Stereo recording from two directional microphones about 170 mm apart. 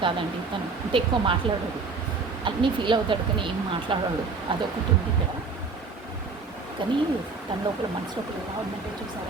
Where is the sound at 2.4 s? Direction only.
30° right (ahead or behind).